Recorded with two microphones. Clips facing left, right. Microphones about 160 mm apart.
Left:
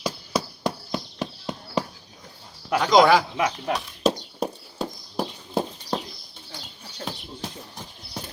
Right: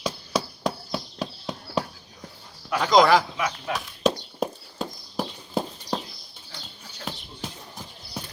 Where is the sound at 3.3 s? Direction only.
35° left (ahead or behind).